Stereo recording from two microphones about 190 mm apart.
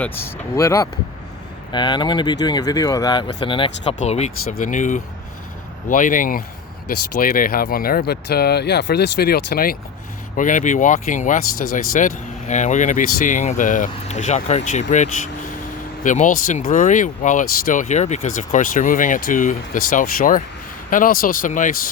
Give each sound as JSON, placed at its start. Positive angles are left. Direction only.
{"t": 0.0, "sound": "speech", "side_deg": 10}